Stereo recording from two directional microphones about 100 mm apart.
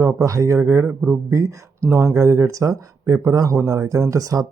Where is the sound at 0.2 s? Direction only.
30° right (ahead or behind).